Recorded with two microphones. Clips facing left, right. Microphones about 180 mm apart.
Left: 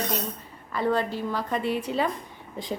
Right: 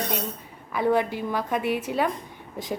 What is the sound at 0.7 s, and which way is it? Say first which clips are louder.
A woman's voice: right 2 dB; 15° right (ahead or behind).